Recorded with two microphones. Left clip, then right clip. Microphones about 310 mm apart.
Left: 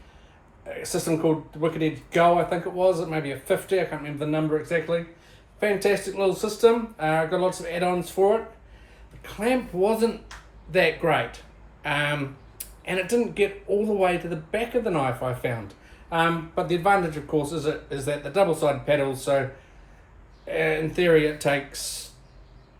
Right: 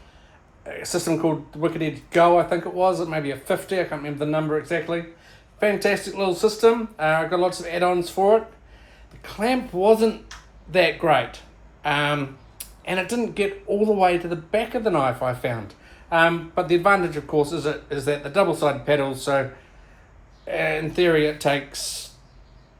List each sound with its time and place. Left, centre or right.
0.7 s speech: right
20.5 s speech: right